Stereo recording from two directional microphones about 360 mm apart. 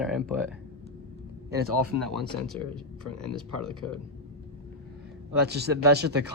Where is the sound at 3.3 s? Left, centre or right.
Centre.